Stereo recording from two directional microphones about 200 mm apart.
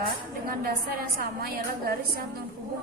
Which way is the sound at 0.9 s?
45° right (ahead or behind).